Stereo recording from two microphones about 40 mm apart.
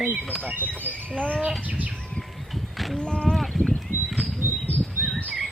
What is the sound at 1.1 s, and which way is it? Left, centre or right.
Speech, left.